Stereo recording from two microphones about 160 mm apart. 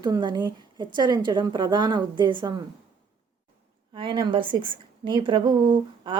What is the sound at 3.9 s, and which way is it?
A woman's voice, 30° right (ahead or behind).